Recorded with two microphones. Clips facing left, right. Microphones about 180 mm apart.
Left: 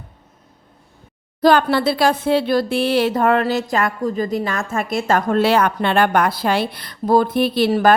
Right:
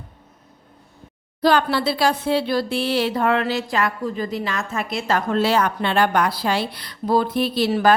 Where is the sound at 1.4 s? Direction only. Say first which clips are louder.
Left 4 dB; 50° left (ahead or behind).